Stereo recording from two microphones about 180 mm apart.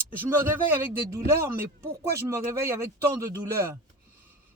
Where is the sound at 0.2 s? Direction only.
10° right (ahead or behind).